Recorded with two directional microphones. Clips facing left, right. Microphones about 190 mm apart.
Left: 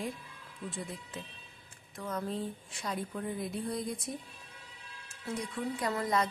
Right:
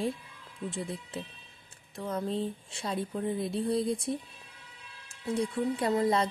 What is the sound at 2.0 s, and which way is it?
A woman's voice, 30° right (ahead or behind).